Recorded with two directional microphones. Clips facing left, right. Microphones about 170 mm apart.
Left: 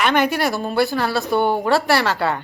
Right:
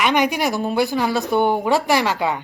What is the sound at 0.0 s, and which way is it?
Speech, 15° right (ahead or behind).